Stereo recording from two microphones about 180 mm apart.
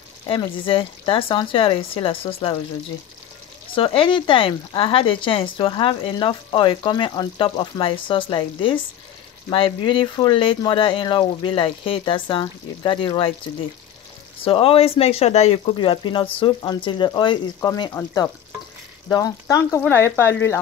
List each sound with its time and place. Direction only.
0.3 s speech: 30° left (ahead or behind)
3.7 s speech: 30° left (ahead or behind)
14.4 s speech: 30° left (ahead or behind); by 20.5 s 15° left (ahead or behind)